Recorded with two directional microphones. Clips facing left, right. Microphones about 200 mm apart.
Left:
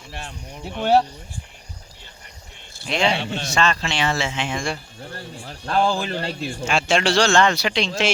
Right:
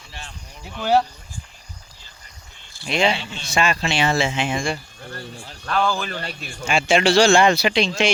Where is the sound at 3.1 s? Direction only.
60° left (ahead or behind).